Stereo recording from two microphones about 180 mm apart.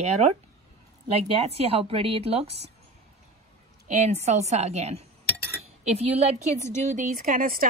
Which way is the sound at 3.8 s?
40° right (ahead or behind).